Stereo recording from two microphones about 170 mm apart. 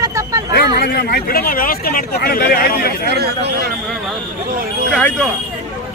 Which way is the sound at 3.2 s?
70° right (ahead or behind).